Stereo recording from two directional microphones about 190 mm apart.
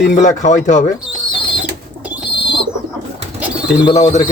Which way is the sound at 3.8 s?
35° left (ahead or behind).